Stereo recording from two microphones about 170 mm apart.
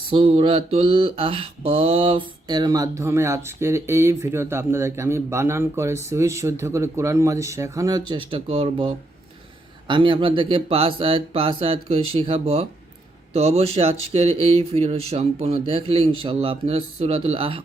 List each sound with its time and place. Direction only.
0.1 s mantra: 30° right (ahead or behind)
9.8 s speech: 30° right (ahead or behind)